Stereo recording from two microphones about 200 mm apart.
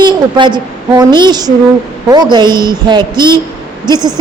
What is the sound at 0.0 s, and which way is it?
A woman's voice, 25° right (ahead or behind).